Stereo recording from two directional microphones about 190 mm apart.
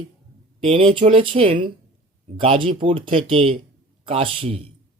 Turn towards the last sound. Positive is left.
turn(degrees=-30)  # may be behind; listen again after turning